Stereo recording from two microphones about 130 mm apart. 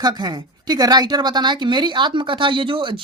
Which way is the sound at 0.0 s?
30° right (ahead or behind).